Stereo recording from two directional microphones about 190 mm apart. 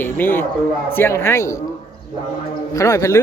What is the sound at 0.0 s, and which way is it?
Speech, 10° left (ahead or behind).